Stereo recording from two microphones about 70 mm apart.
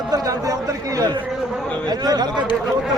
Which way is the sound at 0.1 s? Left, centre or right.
Right.